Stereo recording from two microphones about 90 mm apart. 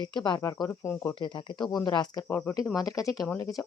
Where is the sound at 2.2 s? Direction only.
25° left (ahead or behind).